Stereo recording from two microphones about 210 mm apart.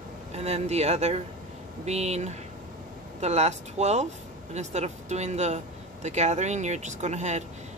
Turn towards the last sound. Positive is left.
turn(degrees=-35)  # may be behind; listen again after turning